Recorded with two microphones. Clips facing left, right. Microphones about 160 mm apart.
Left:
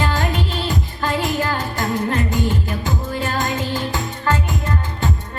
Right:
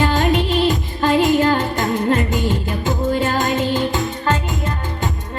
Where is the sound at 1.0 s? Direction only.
20° right (ahead or behind).